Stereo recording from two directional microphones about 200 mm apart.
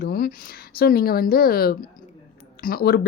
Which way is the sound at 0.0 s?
50° left (ahead or behind).